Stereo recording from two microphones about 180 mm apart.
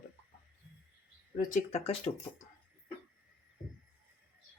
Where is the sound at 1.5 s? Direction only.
40° left (ahead or behind).